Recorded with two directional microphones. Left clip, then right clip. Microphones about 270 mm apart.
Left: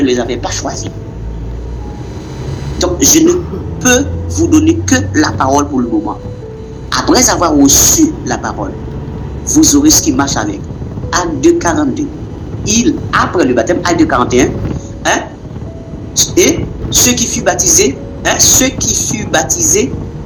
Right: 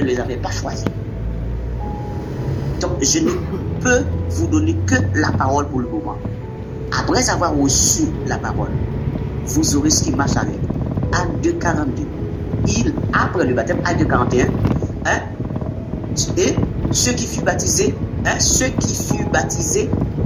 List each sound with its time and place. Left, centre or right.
0.0 s a man's voice: left
2.7 s a sound: left
3.8 s a man's voice: left
16.3 s a man's voice: left